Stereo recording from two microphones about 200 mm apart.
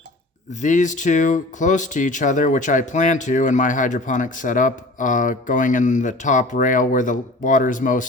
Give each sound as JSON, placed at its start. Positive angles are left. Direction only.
{"t": 0.5, "sound": "speech", "side_deg": 40}